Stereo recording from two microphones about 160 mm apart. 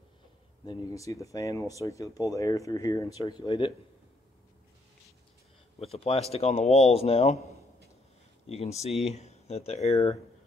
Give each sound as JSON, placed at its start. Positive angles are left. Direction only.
{"t": 0.7, "sound": "speech", "side_deg": 20}
{"t": 5.8, "sound": "speech", "side_deg": 35}
{"t": 8.7, "sound": "speech", "side_deg": 40}